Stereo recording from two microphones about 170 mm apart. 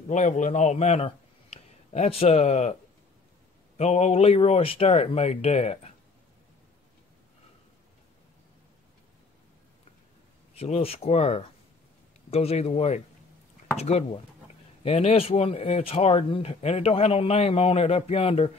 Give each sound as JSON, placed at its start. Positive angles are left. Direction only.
{"t": 0.1, "sound": "a man's voice", "side_deg": 45}
{"t": 10.6, "sound": "speech", "side_deg": 35}